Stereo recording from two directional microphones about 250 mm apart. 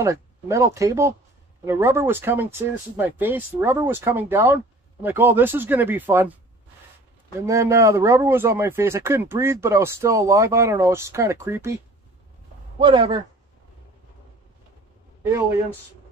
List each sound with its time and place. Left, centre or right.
0.0 s speech: centre
7.4 s a man's voice: centre